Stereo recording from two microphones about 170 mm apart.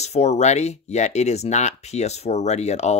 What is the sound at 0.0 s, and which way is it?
Speech, 40° left (ahead or behind).